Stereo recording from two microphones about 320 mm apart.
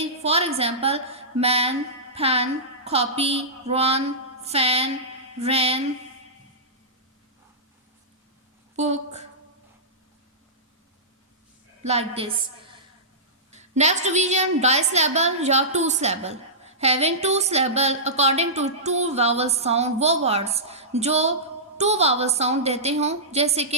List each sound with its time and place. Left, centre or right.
0.2 s a woman's voice: centre
8.7 s a woman's voice: right
11.8 s a woman's voice: centre
13.5 s a woman's voice: right